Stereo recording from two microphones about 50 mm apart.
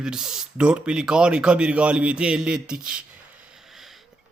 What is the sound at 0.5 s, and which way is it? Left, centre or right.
Speech, right.